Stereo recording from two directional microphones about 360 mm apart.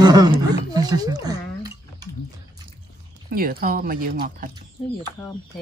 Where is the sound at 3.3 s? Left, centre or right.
Right.